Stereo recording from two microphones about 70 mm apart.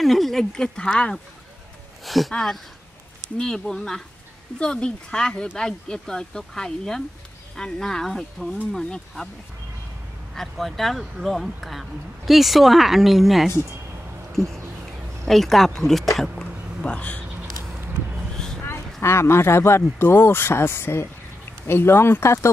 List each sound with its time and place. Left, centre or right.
0.0 s speech: centre
2.0 s speech: centre
10.3 s speech: centre
15.2 s speech: centre
16.3 s a sound: centre
18.3 s a sound: centre
18.9 s speech: left